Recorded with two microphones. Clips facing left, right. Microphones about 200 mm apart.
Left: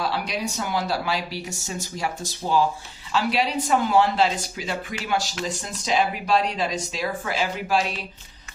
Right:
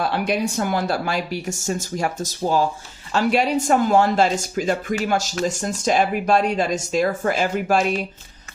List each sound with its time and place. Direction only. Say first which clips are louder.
0.0 s speech: right 5 dB; 55° right (ahead or behind)